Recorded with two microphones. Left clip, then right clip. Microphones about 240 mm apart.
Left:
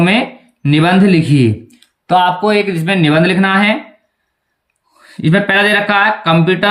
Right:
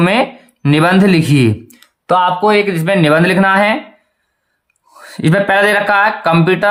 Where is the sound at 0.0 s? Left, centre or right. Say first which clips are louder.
Right 1 dB; centre.